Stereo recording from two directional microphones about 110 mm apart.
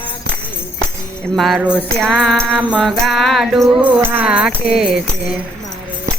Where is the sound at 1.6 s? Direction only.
15° right (ahead or behind).